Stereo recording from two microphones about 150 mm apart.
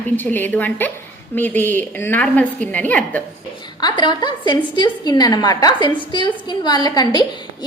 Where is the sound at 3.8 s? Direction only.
30° left (ahead or behind).